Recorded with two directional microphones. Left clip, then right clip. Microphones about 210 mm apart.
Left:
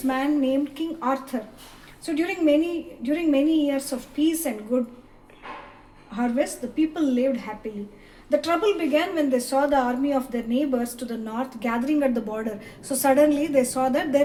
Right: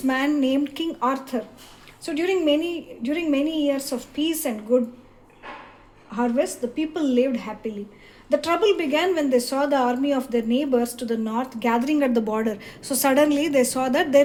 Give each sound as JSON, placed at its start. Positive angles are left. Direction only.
{"t": 0.1, "sound": "a woman's voice", "side_deg": -50}
{"t": 6.1, "sound": "a woman's voice", "side_deg": -35}